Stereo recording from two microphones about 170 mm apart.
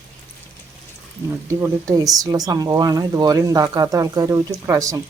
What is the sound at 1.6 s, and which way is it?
A woman's voice, 20° right (ahead or behind).